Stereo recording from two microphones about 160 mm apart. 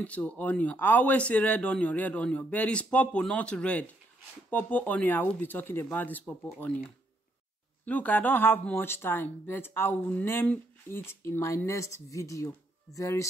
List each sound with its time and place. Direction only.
0.0 s speech: 10° left (ahead or behind)
7.8 s speech: 10° left (ahead or behind)